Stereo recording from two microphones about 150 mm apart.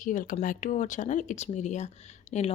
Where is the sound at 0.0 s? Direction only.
60° left (ahead or behind).